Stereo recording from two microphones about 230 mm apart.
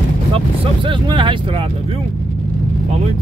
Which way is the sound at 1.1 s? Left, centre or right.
Centre.